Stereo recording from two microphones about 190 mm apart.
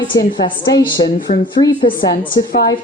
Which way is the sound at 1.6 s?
40° left (ahead or behind).